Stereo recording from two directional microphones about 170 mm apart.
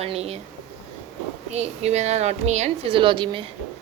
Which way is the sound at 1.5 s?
40° right (ahead or behind).